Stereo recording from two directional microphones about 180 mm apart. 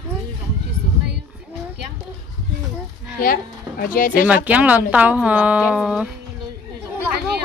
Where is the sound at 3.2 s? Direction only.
50° left (ahead or behind).